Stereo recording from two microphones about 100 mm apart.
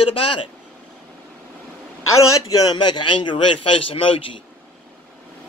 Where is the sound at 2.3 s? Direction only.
35° left (ahead or behind); by 4.4 s 65° left (ahead or behind).